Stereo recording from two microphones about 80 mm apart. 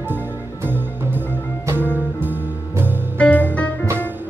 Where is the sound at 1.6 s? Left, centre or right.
Right.